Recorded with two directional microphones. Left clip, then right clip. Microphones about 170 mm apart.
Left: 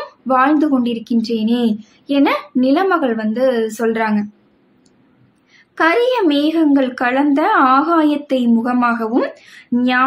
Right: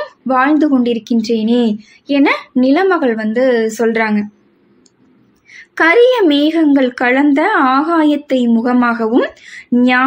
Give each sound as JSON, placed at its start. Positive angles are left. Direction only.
{"t": 0.3, "sound": "a woman's voice", "side_deg": -10}
{"t": 5.5, "sound": "a woman's voice", "side_deg": -20}